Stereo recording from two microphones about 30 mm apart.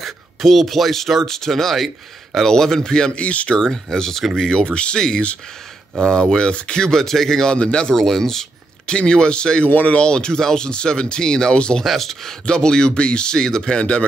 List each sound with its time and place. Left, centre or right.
0.0 s speech: centre; by 3.1 s left
3.2 s speech: left
3.4 s speech: left
4.6 s speech: left; by 8.5 s centre
8.8 s speech: left
11.5 s speech: left
11.8 s speech: centre
12.4 s speech: left
13.7 s speech: left